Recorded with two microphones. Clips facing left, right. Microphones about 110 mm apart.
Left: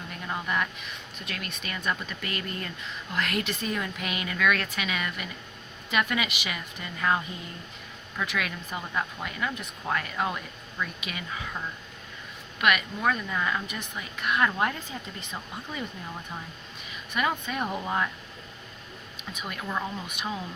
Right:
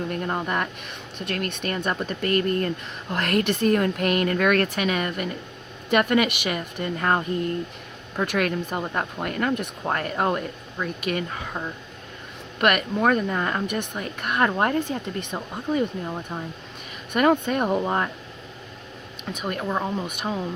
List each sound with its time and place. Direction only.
0.1 s speech: 50° right (ahead or behind)
12.5 s speech: 50° right (ahead or behind)
14.8 s speech: 65° right (ahead or behind)
16.0 s speech: 30° right (ahead or behind)
17.1 s speech: 50° right (ahead or behind)
17.8 s speech: 40° right (ahead or behind)
19.3 s speech: 60° right (ahead or behind)
19.5 s speech: 35° right (ahead or behind)